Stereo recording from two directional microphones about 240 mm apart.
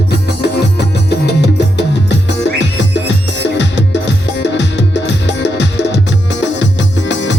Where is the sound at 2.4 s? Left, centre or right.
Left.